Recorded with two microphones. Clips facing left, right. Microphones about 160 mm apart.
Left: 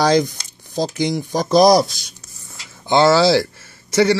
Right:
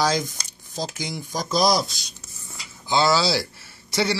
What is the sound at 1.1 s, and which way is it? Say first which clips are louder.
Speech: left 9 dB; 50° left (ahead or behind).